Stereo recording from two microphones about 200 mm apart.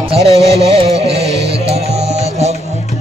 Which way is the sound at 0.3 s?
30° right (ahead or behind).